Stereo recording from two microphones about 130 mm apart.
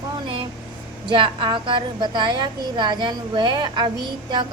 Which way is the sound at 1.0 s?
40° right (ahead or behind).